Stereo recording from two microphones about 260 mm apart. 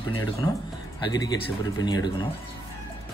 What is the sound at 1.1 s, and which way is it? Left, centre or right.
Speech, centre.